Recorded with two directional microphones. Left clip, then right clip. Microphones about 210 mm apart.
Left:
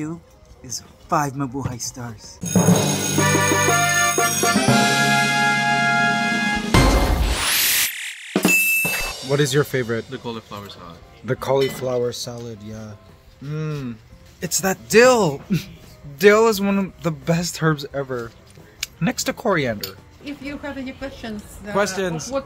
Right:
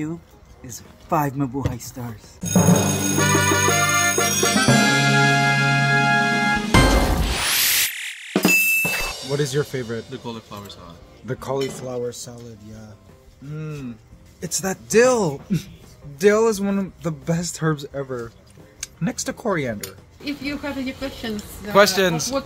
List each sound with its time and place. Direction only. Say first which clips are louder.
0.7 s speech: left 1 dB; 5° left (ahead or behind)
7.8 s music: even; centre (ahead or behind)
9.8 s a woman's voice: left 4 dB; centre (ahead or behind)
10.2 s speech: left 2 dB; 25° right (ahead or behind)
11.2 s speech: left 6 dB; 20° left (ahead or behind)
14.4 s a woman's voice: left 4 dB; centre (ahead or behind)